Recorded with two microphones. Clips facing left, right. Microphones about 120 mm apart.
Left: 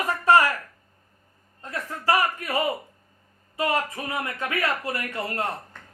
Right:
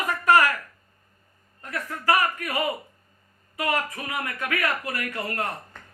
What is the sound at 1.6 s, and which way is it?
Speech, 25° left (ahead or behind).